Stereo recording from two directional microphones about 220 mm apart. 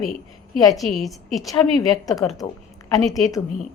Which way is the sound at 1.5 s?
15° left (ahead or behind).